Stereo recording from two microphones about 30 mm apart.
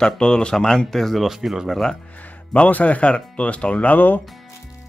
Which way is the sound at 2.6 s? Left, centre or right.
Left.